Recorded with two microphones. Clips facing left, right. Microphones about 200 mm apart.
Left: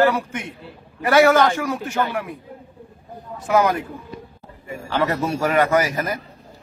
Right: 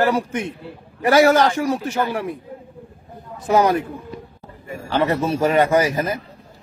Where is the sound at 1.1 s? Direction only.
35° right (ahead or behind).